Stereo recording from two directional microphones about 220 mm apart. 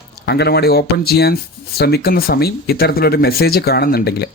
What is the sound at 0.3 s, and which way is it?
Speech, 50° left (ahead or behind).